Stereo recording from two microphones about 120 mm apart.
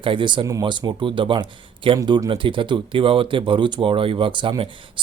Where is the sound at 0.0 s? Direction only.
45° right (ahead or behind).